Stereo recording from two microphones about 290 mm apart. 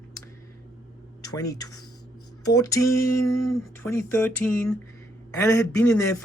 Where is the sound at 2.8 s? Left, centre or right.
Left.